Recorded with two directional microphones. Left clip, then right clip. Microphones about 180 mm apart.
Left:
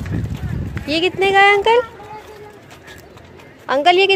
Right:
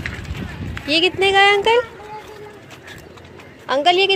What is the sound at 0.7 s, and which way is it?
Speech, 10° left (ahead or behind).